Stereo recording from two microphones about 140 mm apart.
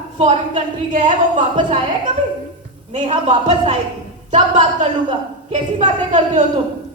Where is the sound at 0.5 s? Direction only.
60° right (ahead or behind).